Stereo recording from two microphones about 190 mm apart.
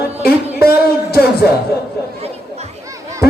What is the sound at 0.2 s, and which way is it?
Music, 55° left (ahead or behind).